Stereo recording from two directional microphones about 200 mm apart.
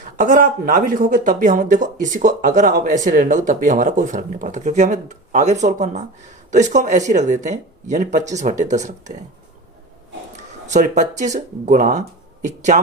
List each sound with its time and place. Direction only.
0.0 s speech: 40° right (ahead or behind)
10.3 s a sound: 35° right (ahead or behind)
11.3 s speech: 35° right (ahead or behind)